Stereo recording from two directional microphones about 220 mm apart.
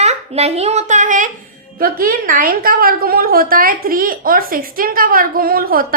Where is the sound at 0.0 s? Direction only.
30° right (ahead or behind).